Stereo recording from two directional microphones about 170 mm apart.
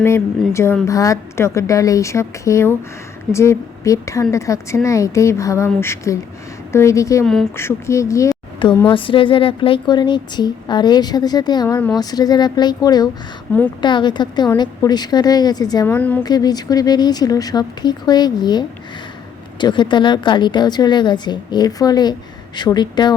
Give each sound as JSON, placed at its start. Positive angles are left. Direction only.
{"t": 0.0, "sound": "a woman's voice", "side_deg": 15}
{"t": 8.9, "sound": "a woman's voice", "side_deg": 30}
{"t": 13.5, "sound": "a woman's voice", "side_deg": 10}
{"t": 13.8, "sound": "a woman's voice", "side_deg": 25}
{"t": 15.9, "sound": "a woman's voice", "side_deg": 10}
{"t": 16.2, "sound": "a woman's voice", "side_deg": 25}